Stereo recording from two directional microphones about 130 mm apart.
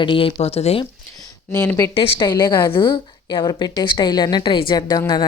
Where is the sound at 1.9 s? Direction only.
45° left (ahead or behind).